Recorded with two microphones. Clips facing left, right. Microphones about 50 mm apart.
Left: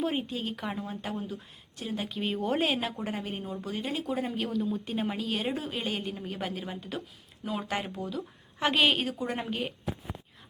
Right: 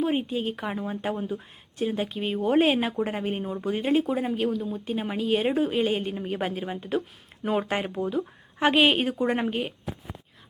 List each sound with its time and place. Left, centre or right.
0.0 s speech: centre
2.0 s a woman's voice: centre
2.6 s speech: right
4.1 s a woman's voice: centre